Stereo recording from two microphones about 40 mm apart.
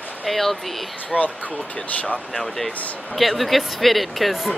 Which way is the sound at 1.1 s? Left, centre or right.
Left.